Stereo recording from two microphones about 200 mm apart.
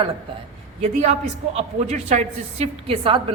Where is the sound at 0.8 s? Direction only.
35° right (ahead or behind).